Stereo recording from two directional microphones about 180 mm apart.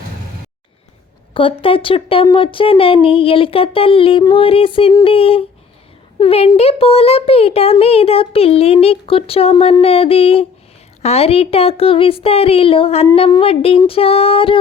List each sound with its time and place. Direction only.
1.3 s speech: 30° left (ahead or behind)